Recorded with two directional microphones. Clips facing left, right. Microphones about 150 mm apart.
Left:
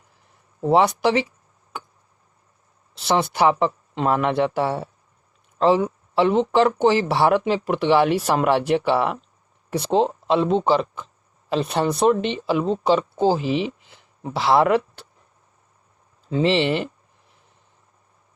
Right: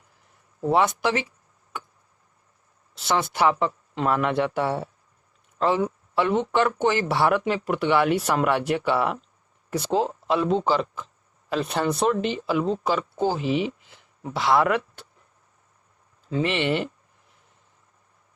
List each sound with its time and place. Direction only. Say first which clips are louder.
0.6 s speech: left 4 dB; 25° left (ahead or behind)
3.0 s speech: left 3 dB; 30° left (ahead or behind)
16.3 s speech: left 4 dB; 30° left (ahead or behind)